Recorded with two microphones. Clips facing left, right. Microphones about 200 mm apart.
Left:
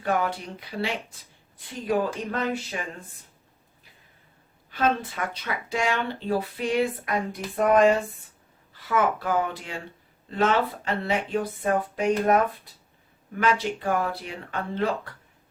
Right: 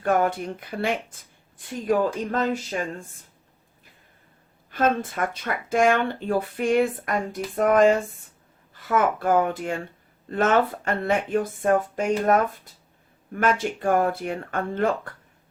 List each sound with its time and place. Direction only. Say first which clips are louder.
0.0 s speech: right 4 dB; 50° right (ahead or behind)
4.7 s speech: right 2 dB; 50° right (ahead or behind)
13.4 s speech: right 2 dB; 50° right (ahead or behind)